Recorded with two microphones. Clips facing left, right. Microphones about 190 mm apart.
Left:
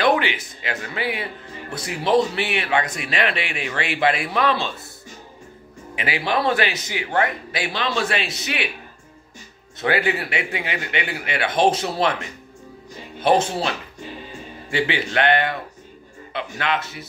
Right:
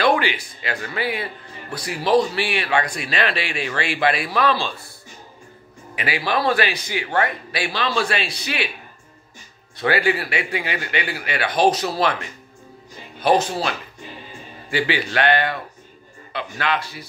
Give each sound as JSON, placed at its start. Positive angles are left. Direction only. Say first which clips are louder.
{"t": 0.0, "sound": "speech", "louder": "even", "side_deg": 20}
{"t": 5.9, "sound": "speech", "louder": "even", "side_deg": 20}
{"t": 9.8, "sound": "speech", "louder": "right 1 dB", "side_deg": 20}